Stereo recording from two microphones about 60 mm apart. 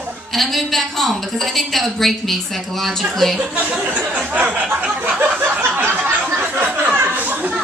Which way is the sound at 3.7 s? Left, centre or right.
Centre.